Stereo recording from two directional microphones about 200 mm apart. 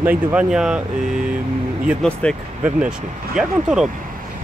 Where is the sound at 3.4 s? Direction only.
5° right (ahead or behind).